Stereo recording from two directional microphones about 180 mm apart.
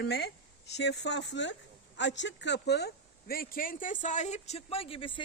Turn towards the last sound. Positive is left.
turn(degrees=30)  # may be behind; listen again after turning